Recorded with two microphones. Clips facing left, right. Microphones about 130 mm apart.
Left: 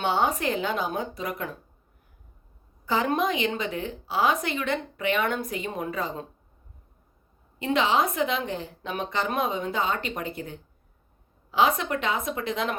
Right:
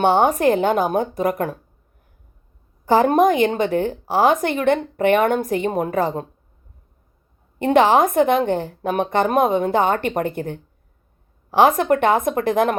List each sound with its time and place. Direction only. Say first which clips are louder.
0.0 s a woman's voice: right 9 dB; 45° right (ahead or behind)
2.8 s a woman's voice: right 10 dB; 50° right (ahead or behind)
7.6 s a woman's voice: right 9 dB; 50° right (ahead or behind)